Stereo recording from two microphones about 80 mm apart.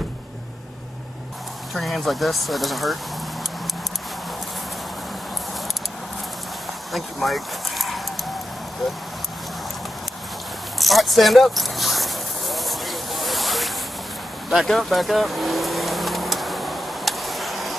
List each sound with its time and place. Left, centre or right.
1.7 s speech: centre
6.9 s speech: centre
10.8 s a sound: centre
14.5 s vehicle: centre